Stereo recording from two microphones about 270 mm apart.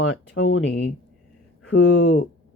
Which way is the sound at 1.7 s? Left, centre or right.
Left.